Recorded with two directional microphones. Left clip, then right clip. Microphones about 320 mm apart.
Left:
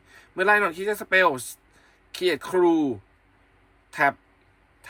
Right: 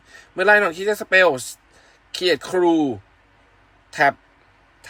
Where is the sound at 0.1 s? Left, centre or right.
Centre.